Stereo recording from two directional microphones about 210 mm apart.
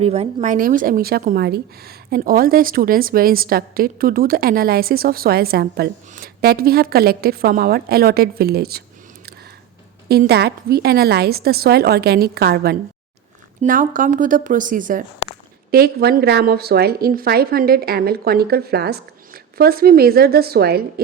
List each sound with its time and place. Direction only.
0.0 s a woman's voice: 30° right (ahead or behind); by 8.8 s 50° right (ahead or behind)
10.1 s a woman's voice: 50° right (ahead or behind)
13.6 s a woman's voice: 40° right (ahead or behind)